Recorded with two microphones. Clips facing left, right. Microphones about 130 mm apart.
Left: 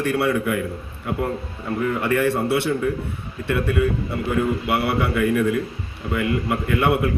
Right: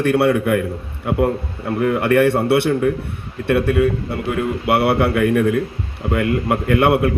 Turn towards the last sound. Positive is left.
turn(degrees=-60)  # may be behind; listen again after turning